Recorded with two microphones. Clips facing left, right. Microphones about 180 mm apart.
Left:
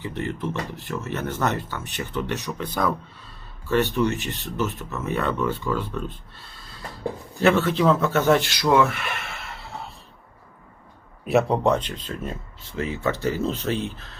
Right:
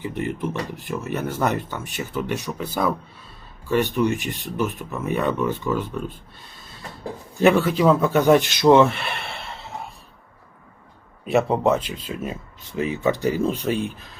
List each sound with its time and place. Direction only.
0.0 s speech: 15° right (ahead or behind)
7.4 s speech: 10° right (ahead or behind); by 9.6 s 30° right (ahead or behind)
11.3 s speech: centre (ahead or behind)